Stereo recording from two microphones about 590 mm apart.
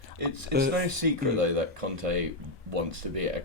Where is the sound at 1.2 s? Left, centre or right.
Right.